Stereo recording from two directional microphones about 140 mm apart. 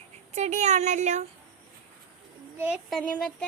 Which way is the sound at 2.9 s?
5° left (ahead or behind).